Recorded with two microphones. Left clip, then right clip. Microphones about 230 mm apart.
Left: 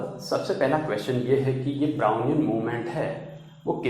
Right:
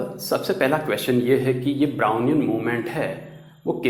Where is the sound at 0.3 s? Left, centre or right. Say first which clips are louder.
Right 3 dB; right.